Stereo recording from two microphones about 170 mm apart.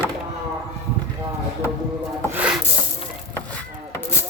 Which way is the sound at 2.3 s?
10° right (ahead or behind).